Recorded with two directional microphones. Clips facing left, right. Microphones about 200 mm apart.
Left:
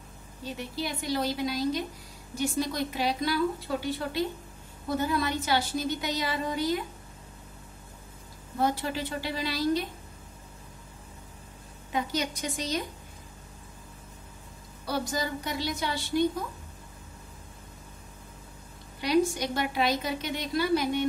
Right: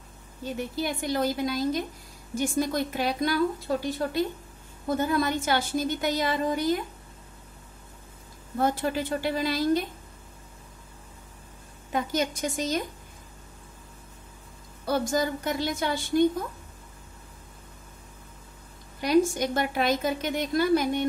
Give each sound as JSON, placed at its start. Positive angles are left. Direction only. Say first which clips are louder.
{"t": 0.7, "sound": "a woman's voice", "louder": "right 2 dB", "side_deg": -50}
{"t": 8.5, "sound": "a woman's voice", "louder": "right 3 dB", "side_deg": -50}
{"t": 11.9, "sound": "a woman's voice", "louder": "right 3 dB", "side_deg": -45}
{"t": 14.9, "sound": "a woman's voice", "louder": "right 5 dB", "side_deg": -50}
{"t": 18.9, "sound": "a woman's voice", "louder": "right 3 dB", "side_deg": -50}